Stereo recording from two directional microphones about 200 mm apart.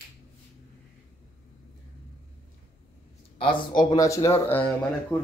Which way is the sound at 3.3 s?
25° left (ahead or behind).